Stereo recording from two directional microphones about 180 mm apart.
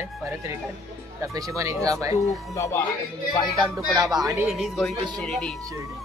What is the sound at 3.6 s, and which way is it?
Speech, 20° right (ahead or behind).